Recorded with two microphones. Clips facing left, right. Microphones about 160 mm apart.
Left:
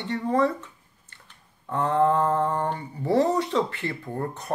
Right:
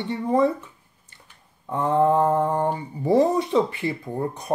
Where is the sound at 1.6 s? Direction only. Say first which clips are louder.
Right 2 dB; 15° right (ahead or behind).